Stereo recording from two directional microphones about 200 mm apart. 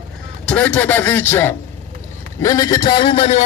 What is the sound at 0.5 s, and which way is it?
A man's voice, 5° left (ahead or behind).